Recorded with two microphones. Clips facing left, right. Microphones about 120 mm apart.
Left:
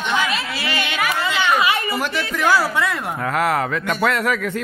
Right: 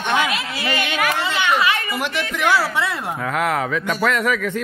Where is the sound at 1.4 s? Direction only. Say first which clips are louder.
Left 1 dB; 20° left (ahead or behind).